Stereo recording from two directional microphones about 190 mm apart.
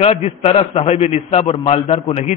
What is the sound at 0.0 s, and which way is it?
A man's voice, 35° left (ahead or behind).